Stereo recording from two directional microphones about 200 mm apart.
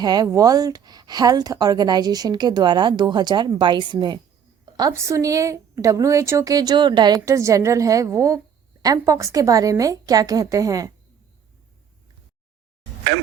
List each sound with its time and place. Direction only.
0.0 s a woman's voice: 20° right (ahead or behind)